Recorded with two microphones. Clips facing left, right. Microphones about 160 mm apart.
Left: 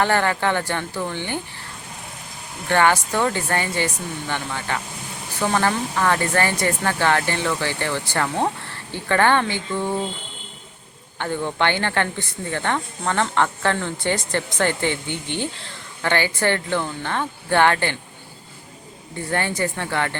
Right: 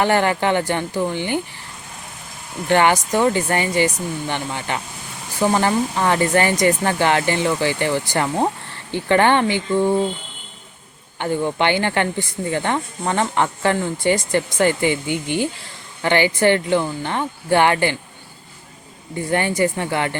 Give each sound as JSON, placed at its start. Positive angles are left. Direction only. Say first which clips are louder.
{"t": 0.0, "sound": "speech", "louder": "right 3 dB", "side_deg": -15}
{"t": 2.6, "sound": "speech", "louder": "right 2 dB", "side_deg": -15}
{"t": 11.2, "sound": "speech", "louder": "right 3 dB", "side_deg": -15}
{"t": 19.3, "sound": "speech", "louder": "right 5 dB", "side_deg": -15}